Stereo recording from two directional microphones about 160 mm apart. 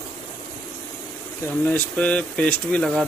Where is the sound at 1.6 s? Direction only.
10° left (ahead or behind).